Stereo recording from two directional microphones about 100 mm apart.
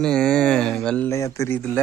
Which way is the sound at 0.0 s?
5° left (ahead or behind).